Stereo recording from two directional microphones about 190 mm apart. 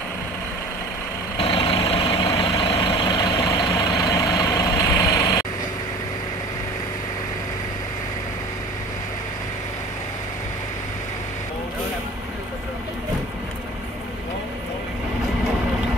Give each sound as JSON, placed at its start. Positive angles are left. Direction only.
{"t": 1.4, "sound": "vehicle", "side_deg": 30}